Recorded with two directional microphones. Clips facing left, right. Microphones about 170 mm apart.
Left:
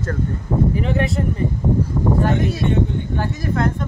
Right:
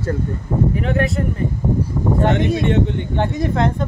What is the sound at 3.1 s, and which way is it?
Speech, 25° right (ahead or behind).